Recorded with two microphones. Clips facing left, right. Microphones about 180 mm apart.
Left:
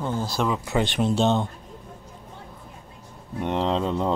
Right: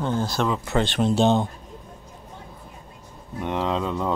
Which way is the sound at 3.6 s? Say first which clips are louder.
Left 1 dB; 30° left (ahead or behind).